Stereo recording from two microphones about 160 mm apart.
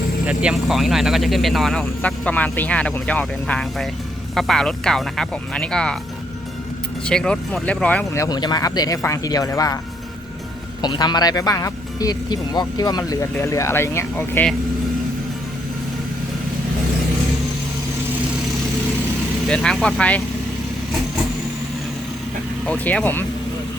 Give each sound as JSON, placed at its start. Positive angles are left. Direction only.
{"t": 0.3, "sound": "speech", "side_deg": -5}
{"t": 7.0, "sound": "speech", "side_deg": 5}
{"t": 10.8, "sound": "speech", "side_deg": 25}
{"t": 19.5, "sound": "speech", "side_deg": 5}
{"t": 22.6, "sound": "speech", "side_deg": 10}